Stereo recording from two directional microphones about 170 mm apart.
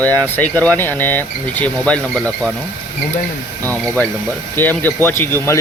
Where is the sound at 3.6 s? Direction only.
10° left (ahead or behind).